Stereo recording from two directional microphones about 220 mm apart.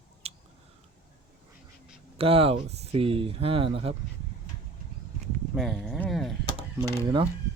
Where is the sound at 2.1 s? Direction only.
25° right (ahead or behind).